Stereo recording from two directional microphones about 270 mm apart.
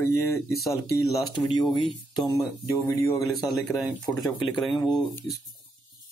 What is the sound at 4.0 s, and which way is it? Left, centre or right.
Speech, centre.